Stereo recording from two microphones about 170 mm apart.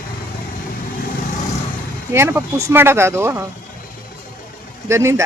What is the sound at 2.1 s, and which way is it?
Speech, 15° right (ahead or behind).